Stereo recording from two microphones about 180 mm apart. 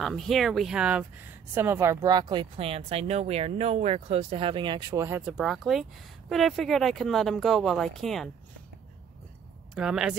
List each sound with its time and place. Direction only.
0.0 s speech: centre (ahead or behind)
5.4 s speech: centre (ahead or behind)
9.8 s speech: 5° right (ahead or behind)